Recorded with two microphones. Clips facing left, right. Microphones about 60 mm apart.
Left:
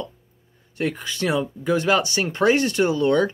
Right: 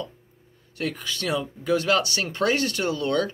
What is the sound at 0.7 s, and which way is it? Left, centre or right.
Speech, left.